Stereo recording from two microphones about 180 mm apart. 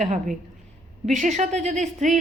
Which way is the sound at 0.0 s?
40° right (ahead or behind).